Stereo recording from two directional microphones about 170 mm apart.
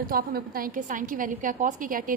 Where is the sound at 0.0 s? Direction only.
60° right (ahead or behind).